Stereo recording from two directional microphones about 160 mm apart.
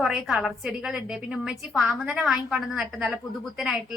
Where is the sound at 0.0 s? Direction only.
Centre (ahead or behind).